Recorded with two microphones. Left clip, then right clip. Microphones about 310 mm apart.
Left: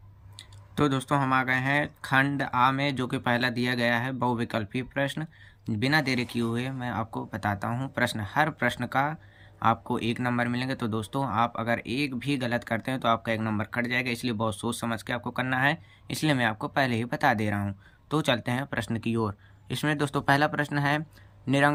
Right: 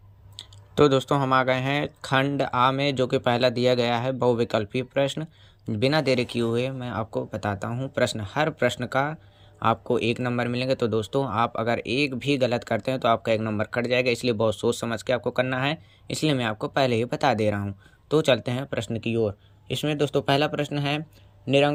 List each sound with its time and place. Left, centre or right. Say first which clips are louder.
0.3 s speech: right 8 dB; centre